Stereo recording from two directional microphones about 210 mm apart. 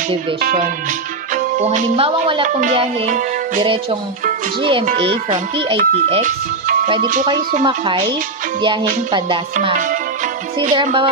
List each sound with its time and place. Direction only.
0.4 s speech: 45° right (ahead or behind)
1.3 s music: 35° right (ahead or behind)
5.8 s music: 30° right (ahead or behind)
7.6 s music: 25° right (ahead or behind)
9.1 s music: 25° right (ahead or behind)